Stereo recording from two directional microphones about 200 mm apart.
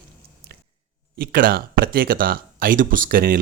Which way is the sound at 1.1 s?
45° right (ahead or behind).